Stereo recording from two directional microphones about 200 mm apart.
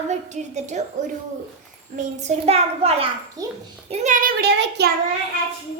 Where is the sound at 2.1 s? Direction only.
35° right (ahead or behind).